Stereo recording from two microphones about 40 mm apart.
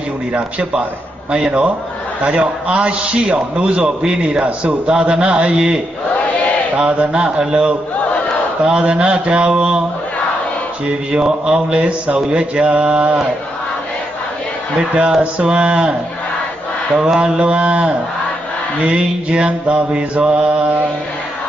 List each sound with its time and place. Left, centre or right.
0.3 s a man's voice: right
6.8 s a man's voice: right
11.1 s a man's voice: right
14.8 s a man's voice: right
17.2 s a man's voice: right